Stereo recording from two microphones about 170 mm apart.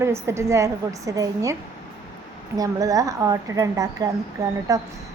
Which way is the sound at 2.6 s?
20° right (ahead or behind).